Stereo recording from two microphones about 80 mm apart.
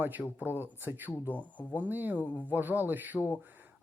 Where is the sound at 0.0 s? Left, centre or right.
Right.